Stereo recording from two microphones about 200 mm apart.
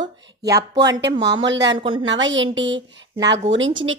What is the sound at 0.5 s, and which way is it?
Speech, 20° right (ahead or behind).